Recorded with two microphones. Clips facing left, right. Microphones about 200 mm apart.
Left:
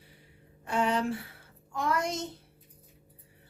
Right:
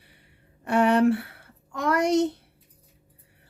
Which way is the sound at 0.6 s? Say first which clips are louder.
Right 9 dB; 65° right (ahead or behind).